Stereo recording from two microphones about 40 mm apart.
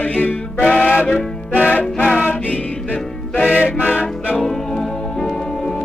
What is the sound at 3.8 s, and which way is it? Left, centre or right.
Music, left.